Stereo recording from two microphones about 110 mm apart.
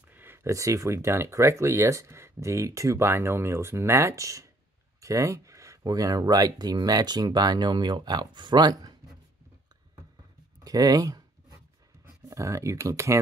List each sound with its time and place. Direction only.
0.1 s speech: 20° right (ahead or behind); by 8.9 s 40° right (ahead or behind)
10.6 s speech: 35° right (ahead or behind)
12.3 s speech: 25° right (ahead or behind)